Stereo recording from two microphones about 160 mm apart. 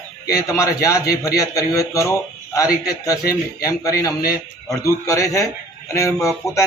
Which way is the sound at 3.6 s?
20° left (ahead or behind).